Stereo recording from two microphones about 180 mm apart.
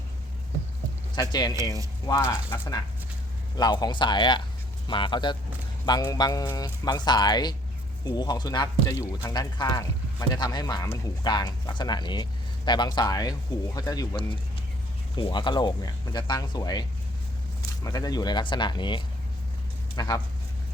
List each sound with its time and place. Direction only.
1.1 s speech: 20° left (ahead or behind)
17.8 s speech: 20° left (ahead or behind)